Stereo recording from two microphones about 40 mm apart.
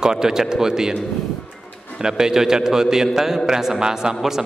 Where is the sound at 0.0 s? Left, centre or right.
Centre.